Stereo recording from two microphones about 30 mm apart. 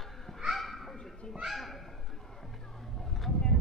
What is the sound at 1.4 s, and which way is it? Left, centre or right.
Speech, centre.